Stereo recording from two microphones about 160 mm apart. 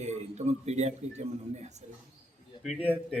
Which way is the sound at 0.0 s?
45° right (ahead or behind).